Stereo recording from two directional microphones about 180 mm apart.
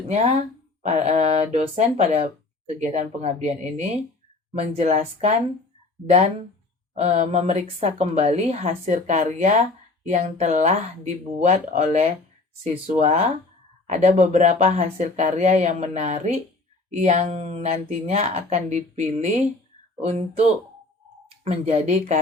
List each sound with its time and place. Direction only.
0.8 s a woman's voice: 40° right (ahead or behind)
7.0 s a woman's voice: 40° right (ahead or behind)
21.4 s a woman's voice: 35° right (ahead or behind)